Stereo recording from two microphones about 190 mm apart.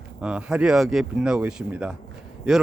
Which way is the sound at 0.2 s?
5° right (ahead or behind).